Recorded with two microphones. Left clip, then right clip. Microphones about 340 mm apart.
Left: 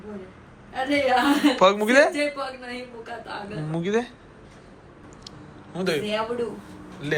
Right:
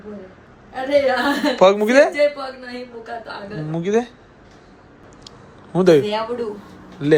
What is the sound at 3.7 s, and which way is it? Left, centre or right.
Speech, centre.